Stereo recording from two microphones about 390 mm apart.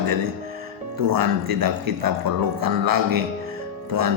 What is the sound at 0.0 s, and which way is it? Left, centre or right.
Speech, right.